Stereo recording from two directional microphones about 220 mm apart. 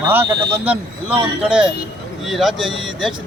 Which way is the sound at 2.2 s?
Centre (ahead or behind).